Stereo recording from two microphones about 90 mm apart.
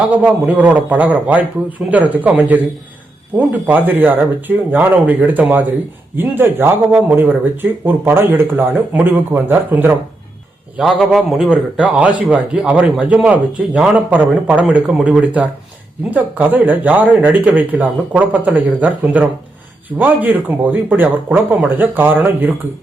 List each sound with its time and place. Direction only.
0.2 s a man's voice: 15° right (ahead or behind)
10.8 s a man's voice: centre (ahead or behind)
11.5 s a man's voice: 15° right (ahead or behind)